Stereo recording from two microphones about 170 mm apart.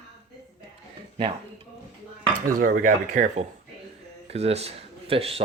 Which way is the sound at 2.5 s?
50° right (ahead or behind).